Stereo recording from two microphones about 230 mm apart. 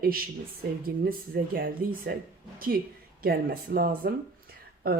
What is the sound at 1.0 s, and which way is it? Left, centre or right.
Speech, right.